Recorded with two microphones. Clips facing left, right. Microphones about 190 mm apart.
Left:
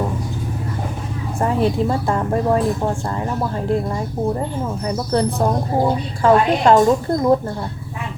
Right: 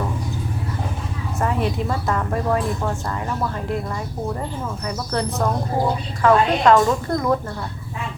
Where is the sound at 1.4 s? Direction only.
30° left (ahead or behind).